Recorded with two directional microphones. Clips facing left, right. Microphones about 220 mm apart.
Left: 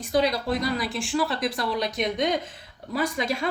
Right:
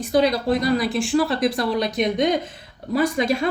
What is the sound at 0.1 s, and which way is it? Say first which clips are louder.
A woman's voice: right 5 dB; 55° right (ahead or behind).